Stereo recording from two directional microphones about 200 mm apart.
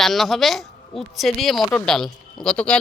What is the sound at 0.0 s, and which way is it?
Speech, centre (ahead or behind).